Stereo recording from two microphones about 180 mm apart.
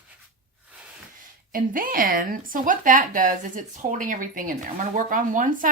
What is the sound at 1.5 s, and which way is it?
A woman's voice, 50° right (ahead or behind).